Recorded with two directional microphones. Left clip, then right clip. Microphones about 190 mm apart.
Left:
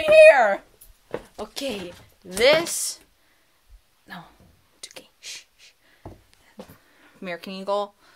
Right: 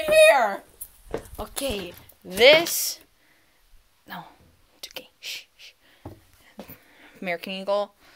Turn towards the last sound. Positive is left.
turn(degrees=0)  # may be behind; listen again after turning